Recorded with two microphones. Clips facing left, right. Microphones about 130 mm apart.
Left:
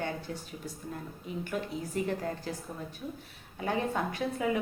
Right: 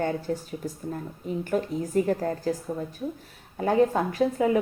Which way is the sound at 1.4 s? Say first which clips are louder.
Right 8 dB; 40° right (ahead or behind).